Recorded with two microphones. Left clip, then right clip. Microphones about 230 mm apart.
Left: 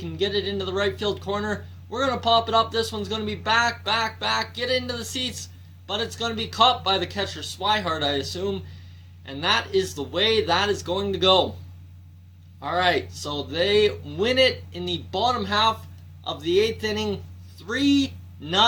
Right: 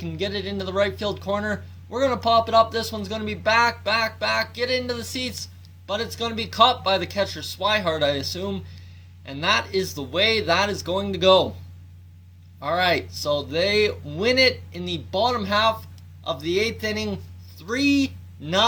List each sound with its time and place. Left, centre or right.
0.0 s speech: right
12.5 s speech: right